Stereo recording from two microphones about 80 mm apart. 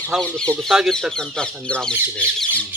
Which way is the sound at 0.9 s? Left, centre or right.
Centre.